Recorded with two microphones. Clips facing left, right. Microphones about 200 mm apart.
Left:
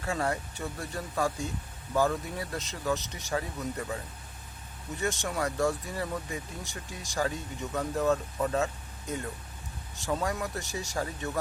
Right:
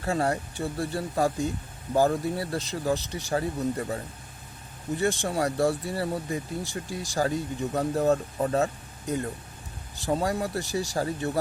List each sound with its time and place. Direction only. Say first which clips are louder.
0.0 s speech: right 4 dB; 35° right (ahead or behind)
9.9 s speech: right 4 dB; 35° right (ahead or behind)